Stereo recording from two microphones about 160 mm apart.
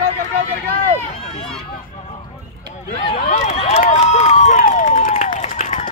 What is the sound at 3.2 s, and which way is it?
Run, 50° left (ahead or behind).